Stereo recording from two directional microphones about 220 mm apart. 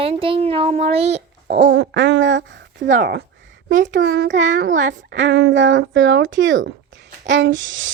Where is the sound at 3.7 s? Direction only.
35° right (ahead or behind).